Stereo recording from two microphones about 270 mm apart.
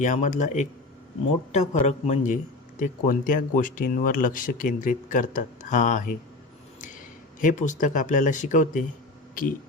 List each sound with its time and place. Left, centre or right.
0.0 s speech: left
1.9 s speech: left
7.4 s speech: left